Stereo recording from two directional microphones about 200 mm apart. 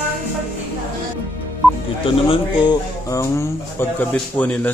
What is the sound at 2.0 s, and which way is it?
Speech, 25° left (ahead or behind).